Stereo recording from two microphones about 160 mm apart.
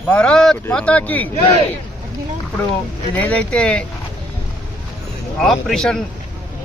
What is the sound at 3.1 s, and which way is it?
Speech, 10° left (ahead or behind).